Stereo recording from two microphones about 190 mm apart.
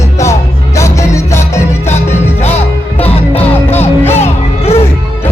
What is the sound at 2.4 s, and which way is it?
Music, 35° left (ahead or behind).